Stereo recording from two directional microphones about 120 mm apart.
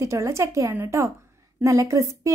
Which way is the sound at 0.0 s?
25° right (ahead or behind).